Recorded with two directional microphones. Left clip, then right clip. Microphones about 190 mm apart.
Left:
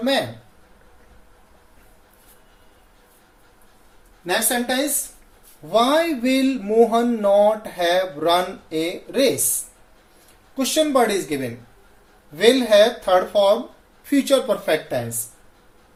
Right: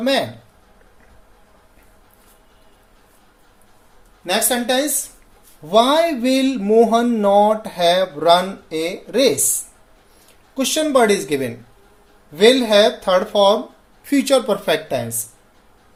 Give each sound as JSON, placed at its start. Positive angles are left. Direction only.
{"t": 4.3, "sound": "speech", "side_deg": -50}
{"t": 10.5, "sound": "speech", "side_deg": -50}